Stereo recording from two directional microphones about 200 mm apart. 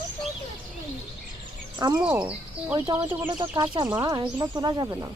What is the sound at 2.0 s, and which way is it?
Speech, 10° right (ahead or behind).